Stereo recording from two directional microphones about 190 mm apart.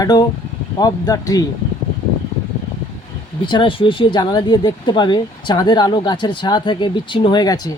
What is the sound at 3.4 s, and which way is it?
Speech, 25° left (ahead or behind).